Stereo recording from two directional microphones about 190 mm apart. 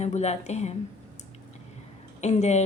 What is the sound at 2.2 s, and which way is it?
Speech, 35° left (ahead or behind).